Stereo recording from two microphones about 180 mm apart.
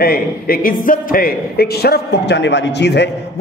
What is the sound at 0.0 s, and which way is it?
A man's voice, 55° left (ahead or behind).